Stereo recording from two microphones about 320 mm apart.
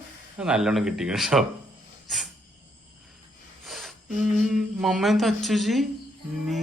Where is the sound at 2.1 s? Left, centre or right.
Centre.